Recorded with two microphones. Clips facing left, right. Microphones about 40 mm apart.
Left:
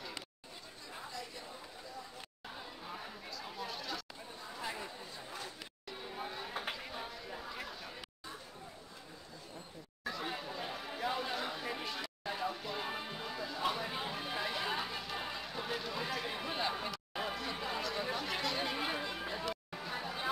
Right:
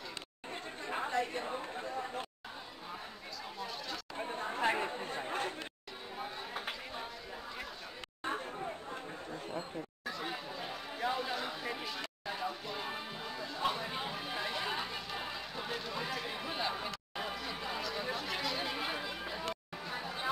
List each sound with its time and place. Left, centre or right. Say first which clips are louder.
0.8 s chatter: right 12 dB; right
3.5 s chatter: even; centre
4.2 s chatter: right 10 dB; right
6.1 s chatter: right 1 dB; centre
10.0 s chatter: left 2 dB; centre
19.8 s a sound: even; centre